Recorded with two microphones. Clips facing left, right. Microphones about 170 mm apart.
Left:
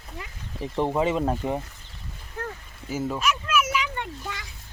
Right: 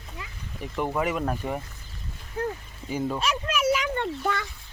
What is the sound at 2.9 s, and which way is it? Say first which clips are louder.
Speech: even; 5° left (ahead or behind).